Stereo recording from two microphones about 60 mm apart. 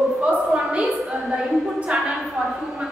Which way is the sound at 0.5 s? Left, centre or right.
Centre.